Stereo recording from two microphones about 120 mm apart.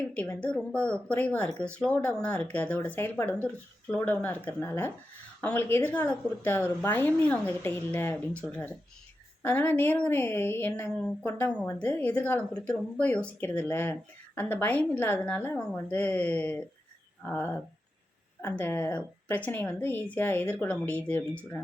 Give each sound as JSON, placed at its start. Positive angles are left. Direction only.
{"t": 0.1, "sound": "a woman's voice", "side_deg": 10}